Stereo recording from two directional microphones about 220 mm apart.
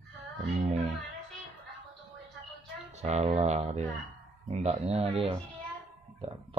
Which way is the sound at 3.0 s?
30° right (ahead or behind).